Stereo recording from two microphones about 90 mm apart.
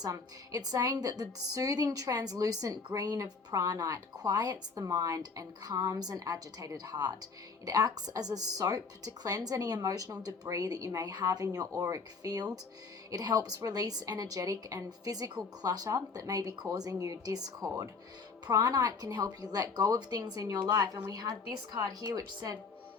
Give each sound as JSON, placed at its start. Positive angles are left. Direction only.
{"t": 0.1, "sound": "a woman's voice", "side_deg": -45}